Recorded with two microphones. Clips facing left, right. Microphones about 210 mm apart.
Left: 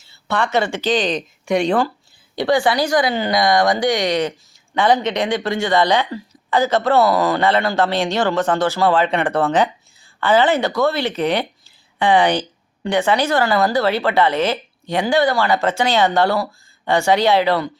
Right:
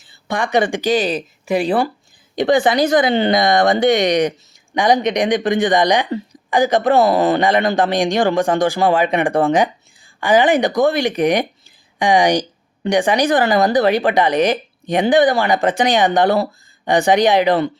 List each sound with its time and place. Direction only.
0.0 s speech: 15° right (ahead or behind)
2.3 s speech: 20° right (ahead or behind)